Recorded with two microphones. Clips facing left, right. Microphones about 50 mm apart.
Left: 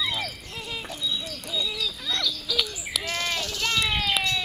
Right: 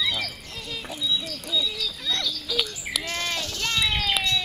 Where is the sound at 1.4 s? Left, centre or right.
Centre.